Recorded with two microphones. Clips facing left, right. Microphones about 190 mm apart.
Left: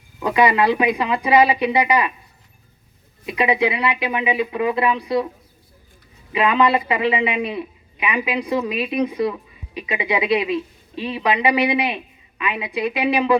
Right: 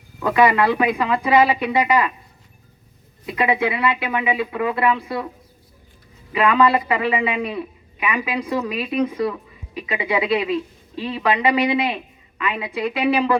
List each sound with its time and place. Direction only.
0.2 s a man's voice: 15° left (ahead or behind)
3.2 s a man's voice: 15° left (ahead or behind)
6.3 s a man's voice: 20° left (ahead or behind)